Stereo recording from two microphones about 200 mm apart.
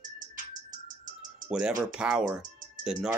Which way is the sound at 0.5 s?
40° right (ahead or behind).